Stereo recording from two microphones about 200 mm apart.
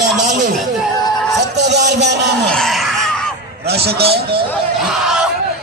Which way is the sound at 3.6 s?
55° right (ahead or behind).